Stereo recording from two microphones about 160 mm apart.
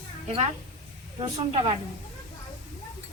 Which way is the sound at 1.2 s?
30° right (ahead or behind).